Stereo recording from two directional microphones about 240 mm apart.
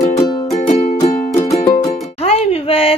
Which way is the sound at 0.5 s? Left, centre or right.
Left.